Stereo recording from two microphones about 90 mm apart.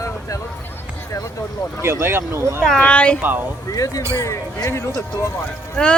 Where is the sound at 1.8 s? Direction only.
30° right (ahead or behind).